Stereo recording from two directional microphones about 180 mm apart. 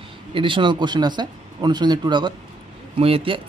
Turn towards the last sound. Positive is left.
turn(degrees=-30)  # may be behind; listen again after turning